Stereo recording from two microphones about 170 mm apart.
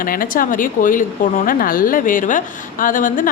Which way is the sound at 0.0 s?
55° left (ahead or behind).